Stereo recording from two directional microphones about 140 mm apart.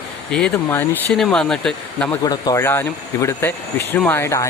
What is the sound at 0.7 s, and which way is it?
Speech, 15° left (ahead or behind).